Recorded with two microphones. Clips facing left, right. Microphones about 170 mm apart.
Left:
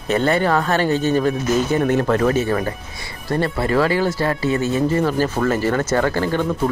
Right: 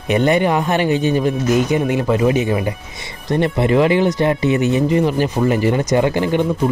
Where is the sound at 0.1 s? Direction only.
15° right (ahead or behind).